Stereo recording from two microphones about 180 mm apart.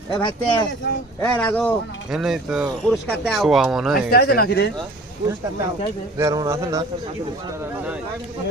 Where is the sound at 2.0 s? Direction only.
Centre (ahead or behind).